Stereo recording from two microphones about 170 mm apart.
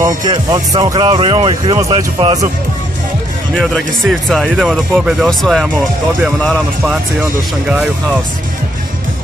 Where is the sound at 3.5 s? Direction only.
Centre (ahead or behind).